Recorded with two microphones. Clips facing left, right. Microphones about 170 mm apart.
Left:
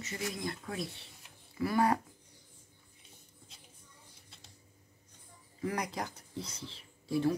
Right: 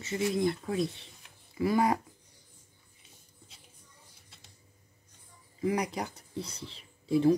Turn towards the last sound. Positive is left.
turn(degrees=-20)  # may be behind; listen again after turning